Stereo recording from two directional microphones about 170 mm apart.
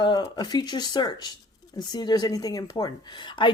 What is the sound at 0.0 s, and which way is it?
Speech, 25° left (ahead or behind).